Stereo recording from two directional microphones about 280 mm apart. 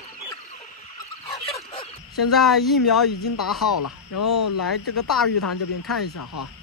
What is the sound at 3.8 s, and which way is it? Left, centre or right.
Speech, left.